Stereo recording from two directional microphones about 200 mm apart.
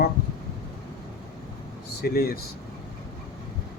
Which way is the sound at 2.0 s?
50° left (ahead or behind).